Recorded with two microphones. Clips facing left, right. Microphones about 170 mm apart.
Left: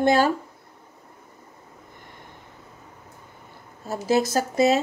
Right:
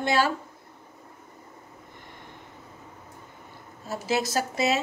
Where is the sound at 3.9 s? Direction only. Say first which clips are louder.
Left 5 dB; 45° left (ahead or behind).